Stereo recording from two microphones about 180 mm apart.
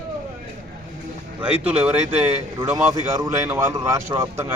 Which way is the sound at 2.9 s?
20° right (ahead or behind).